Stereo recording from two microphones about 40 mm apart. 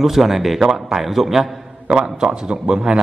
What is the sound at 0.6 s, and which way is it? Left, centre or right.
Speech, centre.